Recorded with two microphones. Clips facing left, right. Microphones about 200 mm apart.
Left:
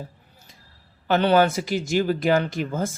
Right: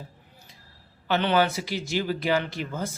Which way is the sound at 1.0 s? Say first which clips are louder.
Left 5 dB; 45° left (ahead or behind).